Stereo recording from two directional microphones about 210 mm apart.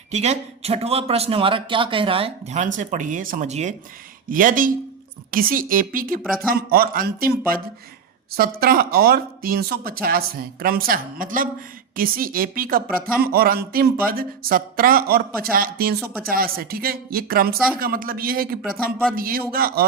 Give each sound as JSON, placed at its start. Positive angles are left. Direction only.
{"t": 0.1, "sound": "a man's voice", "side_deg": -30}
{"t": 16.0, "sound": "speech", "side_deg": 0}
{"t": 16.3, "sound": "speech", "side_deg": -45}